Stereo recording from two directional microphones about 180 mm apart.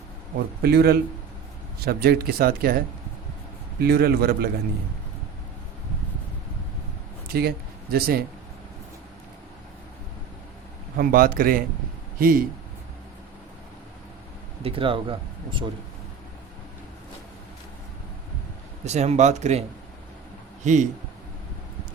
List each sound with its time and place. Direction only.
0.6 s speech: 60° right (ahead or behind)
7.3 s speech: 60° right (ahead or behind)
10.9 s speech: 50° right (ahead or behind)
14.6 s speech: 30° right (ahead or behind)
18.9 s speech: 40° right (ahead or behind)
20.7 s speech: 40° right (ahead or behind)